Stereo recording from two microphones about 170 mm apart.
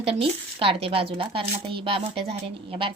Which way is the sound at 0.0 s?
30° right (ahead or behind).